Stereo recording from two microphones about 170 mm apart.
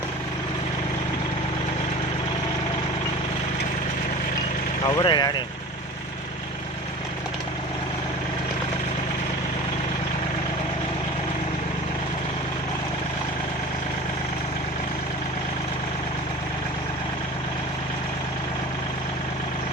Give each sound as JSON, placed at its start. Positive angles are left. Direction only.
{"t": 4.9, "sound": "speech", "side_deg": 25}